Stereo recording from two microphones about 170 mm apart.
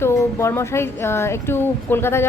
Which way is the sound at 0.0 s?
15° left (ahead or behind).